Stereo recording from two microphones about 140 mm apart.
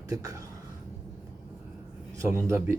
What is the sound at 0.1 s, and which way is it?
Speech, 25° right (ahead or behind).